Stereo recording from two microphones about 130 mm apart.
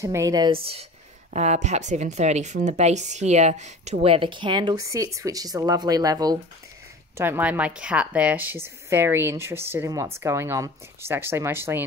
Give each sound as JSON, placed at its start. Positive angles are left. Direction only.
{"t": 0.0, "sound": "a woman's voice", "side_deg": -25}
{"t": 0.5, "sound": "speech", "side_deg": -45}
{"t": 1.3, "sound": "speech", "side_deg": -60}
{"t": 7.2, "sound": "a woman's voice", "side_deg": -15}